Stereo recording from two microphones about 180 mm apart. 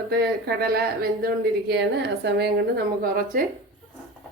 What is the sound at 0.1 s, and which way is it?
Speech, 60° right (ahead or behind).